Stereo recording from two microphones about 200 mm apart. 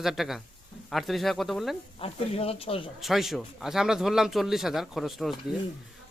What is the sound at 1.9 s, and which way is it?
Speech, 30° left (ahead or behind).